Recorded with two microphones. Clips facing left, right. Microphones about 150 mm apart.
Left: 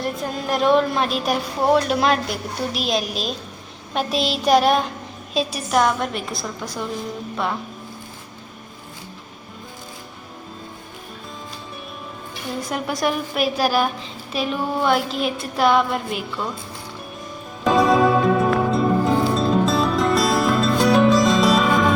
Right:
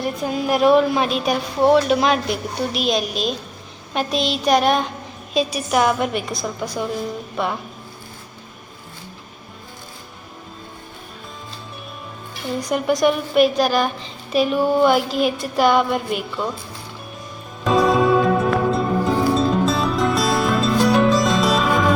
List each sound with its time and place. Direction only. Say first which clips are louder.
0.0 s a woman's voice: right 3 dB; centre (ahead or behind)
12.6 s a woman's voice: right 6 dB; centre (ahead or behind)
17.6 s music: even; centre (ahead or behind)